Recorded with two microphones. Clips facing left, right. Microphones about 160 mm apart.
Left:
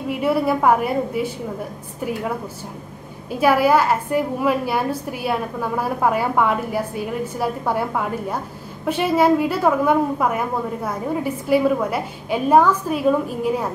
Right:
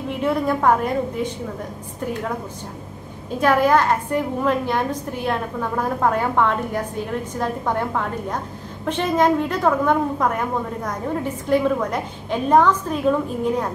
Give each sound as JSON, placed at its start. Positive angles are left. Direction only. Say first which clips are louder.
{"t": 0.2, "sound": "a woman's voice", "louder": "left 1 dB", "side_deg": 10}
{"t": 3.3, "sound": "a woman's voice", "louder": "left 1 dB", "side_deg": 10}